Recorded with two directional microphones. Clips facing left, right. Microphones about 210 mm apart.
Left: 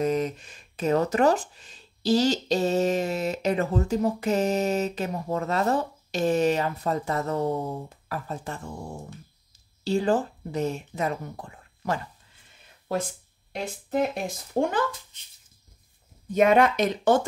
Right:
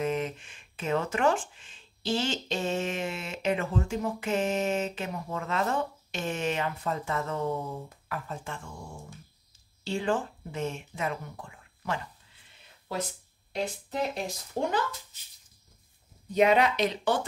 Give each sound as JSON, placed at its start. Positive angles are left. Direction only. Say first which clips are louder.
{"t": 0.0, "sound": "speech", "louder": "left 5 dB", "side_deg": 40}
{"t": 9.8, "sound": "speech", "louder": "left 6 dB", "side_deg": 40}
{"t": 12.9, "sound": "speech", "louder": "left 5 dB", "side_deg": 50}
{"t": 16.3, "sound": "speech", "louder": "left 3 dB", "side_deg": 50}